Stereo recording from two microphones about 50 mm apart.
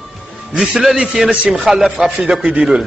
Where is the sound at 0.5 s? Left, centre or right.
Centre.